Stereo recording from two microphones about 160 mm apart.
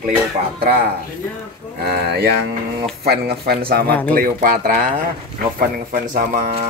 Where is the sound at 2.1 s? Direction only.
90° right; by 3.9 s 75° right (ahead or behind).